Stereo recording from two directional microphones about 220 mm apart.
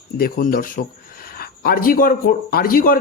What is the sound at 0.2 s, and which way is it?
Speech, 40° left (ahead or behind).